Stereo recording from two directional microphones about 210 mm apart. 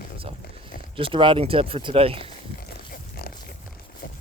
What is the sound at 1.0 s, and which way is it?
Speech, 25° right (ahead or behind).